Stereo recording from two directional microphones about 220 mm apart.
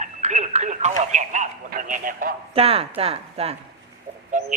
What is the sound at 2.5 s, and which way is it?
A man's voice, 25° right (ahead or behind).